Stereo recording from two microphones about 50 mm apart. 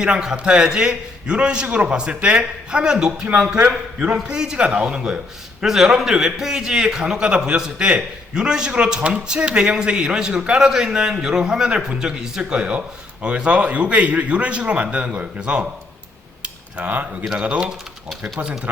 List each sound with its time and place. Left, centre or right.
0.0 s a man's voice: centre
3.6 s a man's voice: right
4.3 s a man's voice: centre
16.4 s cutlery: right
17.3 s a man's voice: right